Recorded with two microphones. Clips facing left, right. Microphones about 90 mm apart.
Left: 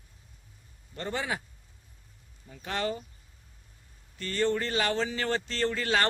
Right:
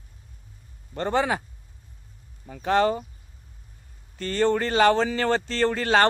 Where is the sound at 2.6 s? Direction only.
40° right (ahead or behind).